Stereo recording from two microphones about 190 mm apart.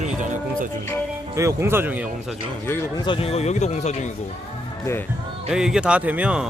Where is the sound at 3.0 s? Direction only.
30° left (ahead or behind).